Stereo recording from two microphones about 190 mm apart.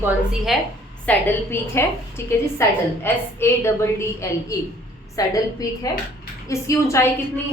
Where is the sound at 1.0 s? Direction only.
15° left (ahead or behind).